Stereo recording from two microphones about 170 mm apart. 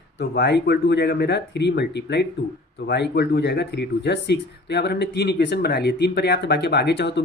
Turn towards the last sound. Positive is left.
turn(degrees=90)